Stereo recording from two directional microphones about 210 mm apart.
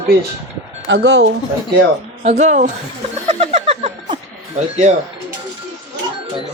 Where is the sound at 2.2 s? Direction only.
35° right (ahead or behind).